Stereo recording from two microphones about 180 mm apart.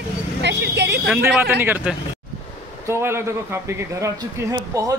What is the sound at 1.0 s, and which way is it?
A man's voice, 10° right (ahead or behind).